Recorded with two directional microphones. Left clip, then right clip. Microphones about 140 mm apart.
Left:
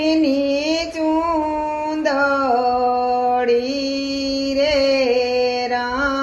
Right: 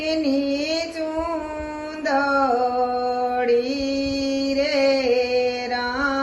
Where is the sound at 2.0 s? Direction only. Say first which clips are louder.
Left 1 dB; 30° left (ahead or behind).